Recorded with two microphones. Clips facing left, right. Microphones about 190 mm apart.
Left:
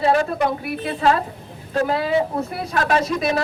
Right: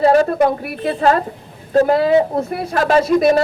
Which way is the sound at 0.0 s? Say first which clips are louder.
Right 6 dB; 40° right (ahead or behind).